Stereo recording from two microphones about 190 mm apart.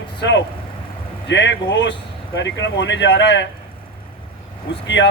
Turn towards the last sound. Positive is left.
turn(degrees=70)  # may be behind; listen again after turning